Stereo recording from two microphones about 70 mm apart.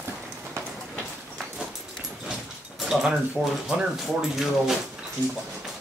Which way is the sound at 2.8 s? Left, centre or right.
Centre.